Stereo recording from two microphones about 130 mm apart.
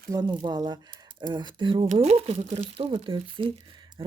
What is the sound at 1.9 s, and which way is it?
Speech, 55° right (ahead or behind).